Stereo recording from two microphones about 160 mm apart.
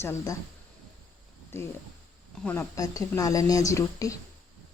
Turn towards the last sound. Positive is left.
turn(degrees=20)  # may be behind; listen again after turning